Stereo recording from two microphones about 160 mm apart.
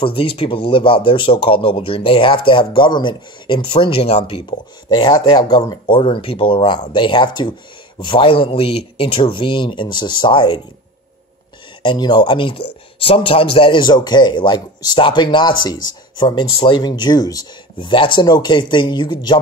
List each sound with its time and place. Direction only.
0.0 s speech: 35° left (ahead or behind)
11.8 s speech: 30° left (ahead or behind)